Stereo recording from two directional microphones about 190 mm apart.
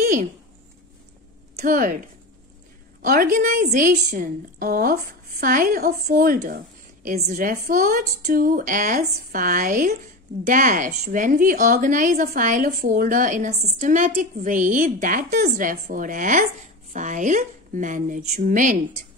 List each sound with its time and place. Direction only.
0.0 s a sound: 50° right (ahead or behind)
1.6 s a woman's voice: 50° right (ahead or behind)
3.0 s a woman's voice: 45° right (ahead or behind)